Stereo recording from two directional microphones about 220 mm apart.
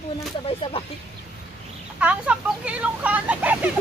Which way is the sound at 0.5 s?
25° left (ahead or behind).